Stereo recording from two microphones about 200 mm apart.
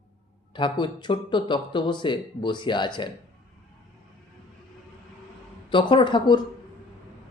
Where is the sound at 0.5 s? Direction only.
25° left (ahead or behind).